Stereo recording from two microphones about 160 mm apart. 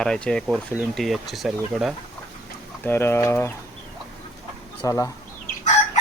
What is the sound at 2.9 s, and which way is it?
Speech, 15° left (ahead or behind).